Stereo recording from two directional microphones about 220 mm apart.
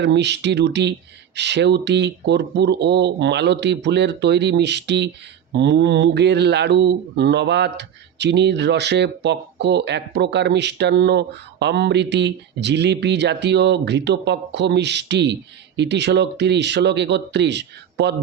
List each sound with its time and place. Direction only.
0.0 s mantra: 50° right (ahead or behind)